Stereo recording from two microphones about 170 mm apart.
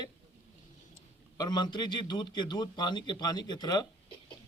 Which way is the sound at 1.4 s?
25° left (ahead or behind).